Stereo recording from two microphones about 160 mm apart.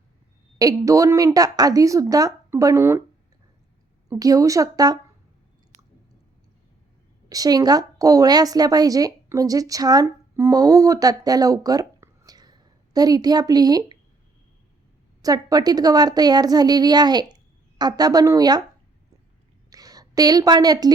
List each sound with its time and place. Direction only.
0.6 s a woman's voice: 20° right (ahead or behind)
4.1 s a woman's voice: 20° right (ahead or behind)
7.3 s a woman's voice: 25° right (ahead or behind)
15.2 s a woman's voice: 25° right (ahead or behind)
19.7 s a woman's voice: 25° right (ahead or behind)